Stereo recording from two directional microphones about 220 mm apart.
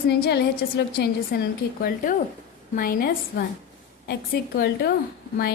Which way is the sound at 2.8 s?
40° left (ahead or behind).